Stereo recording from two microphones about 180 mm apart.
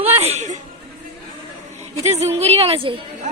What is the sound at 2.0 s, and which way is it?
Speech, 35° right (ahead or behind).